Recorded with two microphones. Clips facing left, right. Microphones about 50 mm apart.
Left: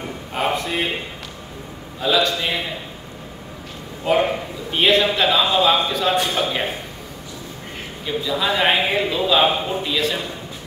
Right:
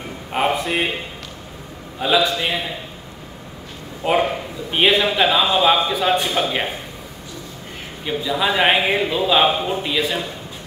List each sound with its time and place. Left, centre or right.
0.3 s a man's voice: centre
2.0 s a man's voice: centre
4.0 s a man's voice: right
8.0 s a man's voice: centre